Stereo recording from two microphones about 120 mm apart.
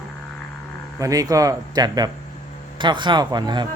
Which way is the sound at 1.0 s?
30° right (ahead or behind).